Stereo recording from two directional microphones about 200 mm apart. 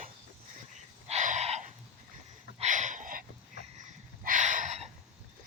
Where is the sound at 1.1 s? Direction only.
35° right (ahead or behind).